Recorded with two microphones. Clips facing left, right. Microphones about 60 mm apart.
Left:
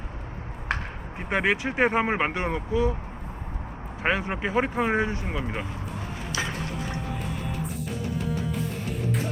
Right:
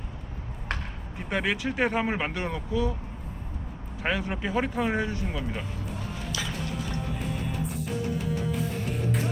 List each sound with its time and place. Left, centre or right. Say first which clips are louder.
1.2 s speech: left 3 dB; left
4.0 s speech: left 3 dB; left